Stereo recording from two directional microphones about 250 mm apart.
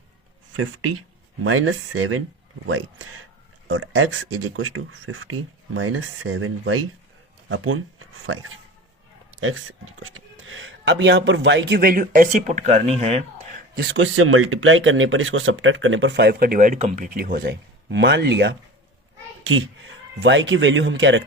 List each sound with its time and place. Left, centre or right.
0.5 s a man's voice: right
13.7 s speech: right
20.1 s speech: right